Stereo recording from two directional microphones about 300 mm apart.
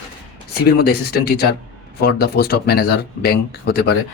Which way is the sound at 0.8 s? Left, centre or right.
Left.